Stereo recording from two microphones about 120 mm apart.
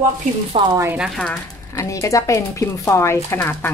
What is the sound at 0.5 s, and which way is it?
Speech, 55° right (ahead or behind).